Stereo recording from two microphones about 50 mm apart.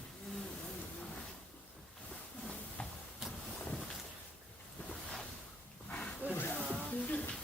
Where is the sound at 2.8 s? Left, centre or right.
Centre.